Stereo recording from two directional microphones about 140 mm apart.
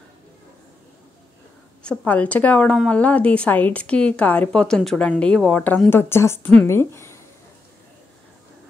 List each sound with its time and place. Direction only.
1.8 s a woman's voice: 10° left (ahead or behind)